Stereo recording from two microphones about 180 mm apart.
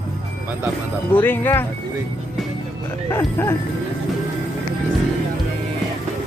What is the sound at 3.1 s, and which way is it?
Speech, 15° left (ahead or behind).